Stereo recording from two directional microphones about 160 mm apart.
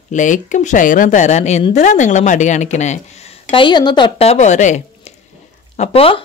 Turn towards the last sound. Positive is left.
turn(degrees=35)  # may be behind; listen again after turning